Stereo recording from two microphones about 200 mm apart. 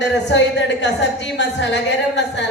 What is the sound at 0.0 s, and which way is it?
Speech, 60° left (ahead or behind).